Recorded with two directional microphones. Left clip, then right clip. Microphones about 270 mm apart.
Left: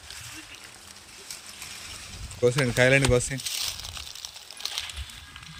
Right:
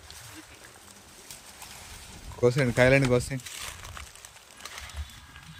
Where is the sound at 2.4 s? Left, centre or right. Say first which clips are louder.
Left 1 dB; centre.